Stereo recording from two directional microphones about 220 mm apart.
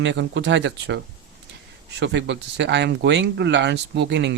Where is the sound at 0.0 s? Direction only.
55° right (ahead or behind).